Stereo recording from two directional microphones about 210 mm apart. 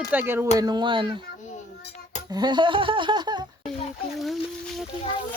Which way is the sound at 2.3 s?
20° right (ahead or behind).